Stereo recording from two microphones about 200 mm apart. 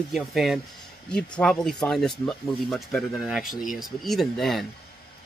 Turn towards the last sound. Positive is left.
turn(degrees=0)  # may be behind; listen again after turning